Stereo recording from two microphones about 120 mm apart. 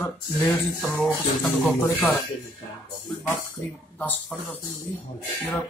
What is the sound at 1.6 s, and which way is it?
Speech, 15° left (ahead or behind).